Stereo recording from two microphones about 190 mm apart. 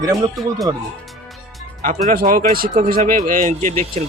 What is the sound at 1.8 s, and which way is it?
Speech, 45° right (ahead or behind).